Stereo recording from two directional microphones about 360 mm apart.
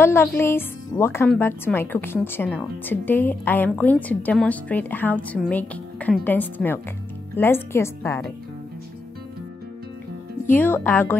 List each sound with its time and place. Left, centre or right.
0.0 s a woman's voice: centre
10.5 s a woman's voice: centre